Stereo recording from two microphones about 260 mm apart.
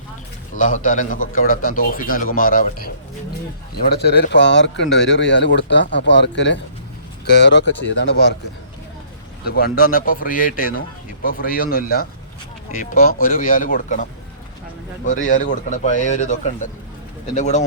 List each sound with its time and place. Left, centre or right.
0.6 s speech: left
9.4 s speech: left